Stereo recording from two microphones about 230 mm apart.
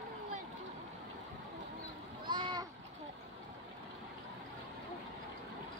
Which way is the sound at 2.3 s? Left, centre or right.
Centre.